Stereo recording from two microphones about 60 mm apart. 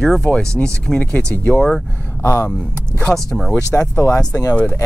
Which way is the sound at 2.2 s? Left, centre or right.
Left.